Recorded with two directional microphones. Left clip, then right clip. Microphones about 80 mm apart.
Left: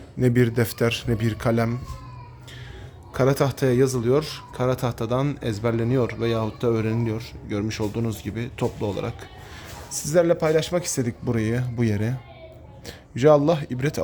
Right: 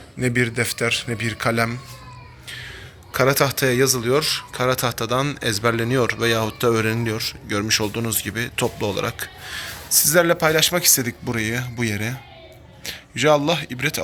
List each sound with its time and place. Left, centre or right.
0.2 s speech: left
1.4 s speech: left
3.1 s speech: left
10.8 s speech: left
12.8 s a man's voice: left